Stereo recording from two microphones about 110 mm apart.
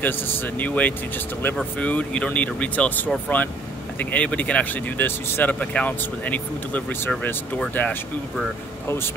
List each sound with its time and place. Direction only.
0.6 s speech: 15° left (ahead or behind)